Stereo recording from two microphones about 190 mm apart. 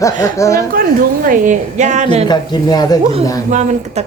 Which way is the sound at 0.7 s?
50° right (ahead or behind).